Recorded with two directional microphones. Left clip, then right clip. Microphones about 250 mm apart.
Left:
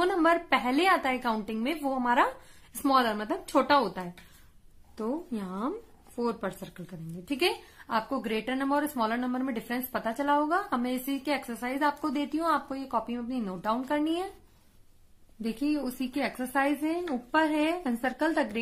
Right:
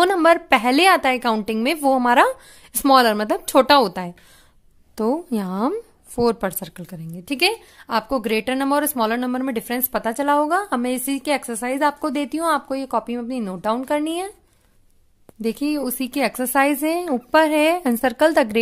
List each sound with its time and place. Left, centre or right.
0.0 s a woman's voice: right
15.4 s a woman's voice: right